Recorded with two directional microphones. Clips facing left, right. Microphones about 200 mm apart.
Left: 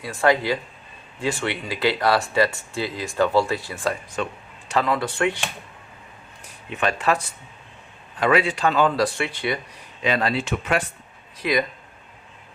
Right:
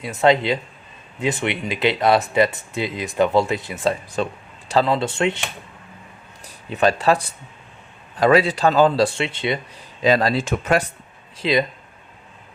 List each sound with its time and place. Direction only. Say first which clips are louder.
0.0 s speech: right 3 dB; 20° right (ahead or behind)
4.2 s a man's voice: right 4 dB; 35° right (ahead or behind)
6.4 s speech: right 6 dB; 35° right (ahead or behind)
8.2 s a man's voice: right 4 dB; 35° right (ahead or behind)
10.0 s a man's voice: right 5 dB; 35° right (ahead or behind)
11.3 s speech: right 3 dB; 25° right (ahead or behind)